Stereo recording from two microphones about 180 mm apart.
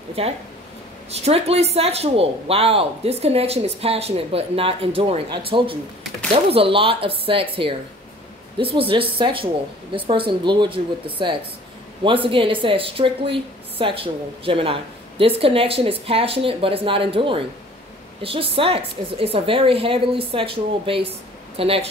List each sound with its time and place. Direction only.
0.2 s speech: 30° right (ahead or behind)